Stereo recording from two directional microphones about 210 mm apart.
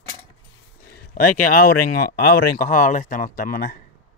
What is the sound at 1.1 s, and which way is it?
Speech, 40° left (ahead or behind).